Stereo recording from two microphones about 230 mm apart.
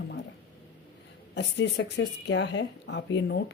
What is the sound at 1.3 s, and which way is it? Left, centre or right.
Speech, left.